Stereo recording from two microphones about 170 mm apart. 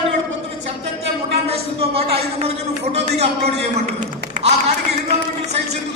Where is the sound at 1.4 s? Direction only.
35° right (ahead or behind).